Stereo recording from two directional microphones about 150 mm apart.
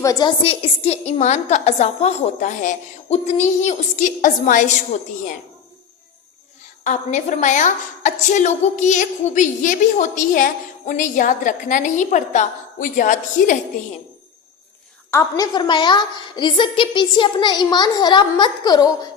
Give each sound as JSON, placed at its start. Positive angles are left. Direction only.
{"t": 0.0, "sound": "a woman's voice", "side_deg": 25}
{"t": 6.8, "sound": "a woman's voice", "side_deg": 50}
{"t": 15.1, "sound": "a woman's voice", "side_deg": 25}